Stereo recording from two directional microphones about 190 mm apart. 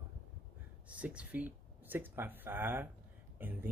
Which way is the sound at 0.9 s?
5° right (ahead or behind).